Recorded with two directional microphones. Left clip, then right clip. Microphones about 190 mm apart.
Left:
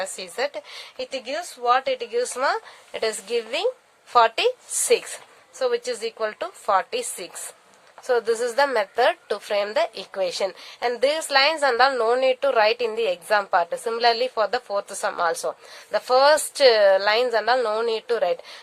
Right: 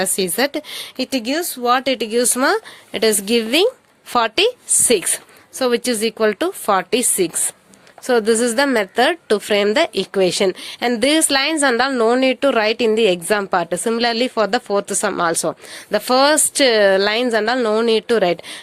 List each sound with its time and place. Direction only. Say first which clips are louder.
0.0 s a woman's voice: right 8 dB; 45° right (ahead or behind)